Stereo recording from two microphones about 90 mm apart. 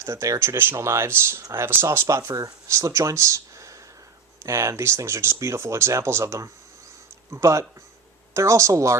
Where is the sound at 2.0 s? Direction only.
35° right (ahead or behind).